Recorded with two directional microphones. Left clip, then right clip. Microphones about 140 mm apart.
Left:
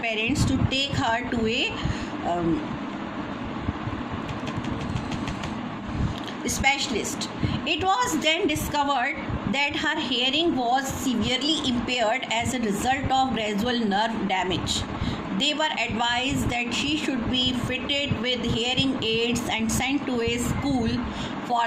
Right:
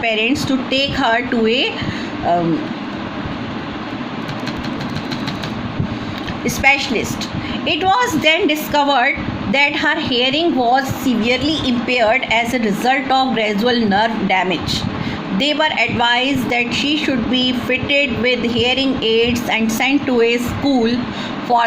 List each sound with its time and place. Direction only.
0.0 s a woman's voice: 40° right (ahead or behind)
6.4 s a woman's voice: 30° right (ahead or behind)